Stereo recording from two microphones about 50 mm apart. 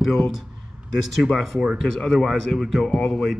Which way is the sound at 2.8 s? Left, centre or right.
Centre.